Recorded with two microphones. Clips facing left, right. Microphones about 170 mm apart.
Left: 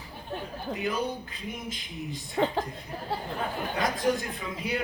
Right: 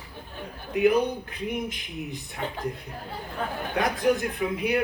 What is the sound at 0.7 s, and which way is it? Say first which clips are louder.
A man's voice: right 10 dB; 65° right (ahead or behind).